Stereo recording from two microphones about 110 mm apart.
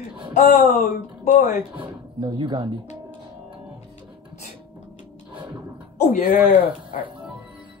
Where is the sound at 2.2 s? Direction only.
40° right (ahead or behind).